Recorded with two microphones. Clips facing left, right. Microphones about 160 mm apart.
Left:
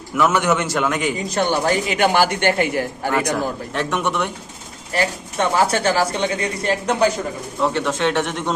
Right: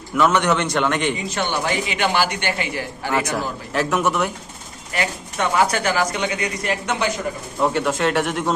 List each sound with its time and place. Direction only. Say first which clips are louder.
0.2 s a man's voice: even; 5° left (ahead or behind)
1.3 s speech: left 4 dB; 40° left (ahead or behind)
3.8 s a man's voice: right 2 dB; 5° right (ahead or behind)
4.9 s speech: left 3 dB; 30° left (ahead or behind)
7.7 s speech: even; 10° right (ahead or behind)